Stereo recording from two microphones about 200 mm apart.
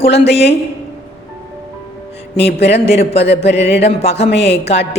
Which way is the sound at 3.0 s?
30° left (ahead or behind).